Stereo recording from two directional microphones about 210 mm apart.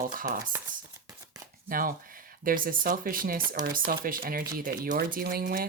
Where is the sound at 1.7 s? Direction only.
40° right (ahead or behind).